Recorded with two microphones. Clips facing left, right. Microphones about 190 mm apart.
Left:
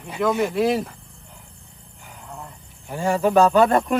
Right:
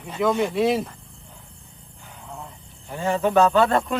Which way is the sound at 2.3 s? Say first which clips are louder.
Even; centre (ahead or behind).